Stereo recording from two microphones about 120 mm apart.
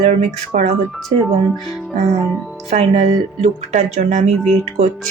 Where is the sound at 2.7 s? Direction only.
65° right (ahead or behind).